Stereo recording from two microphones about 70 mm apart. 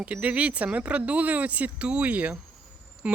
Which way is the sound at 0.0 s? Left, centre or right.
Right.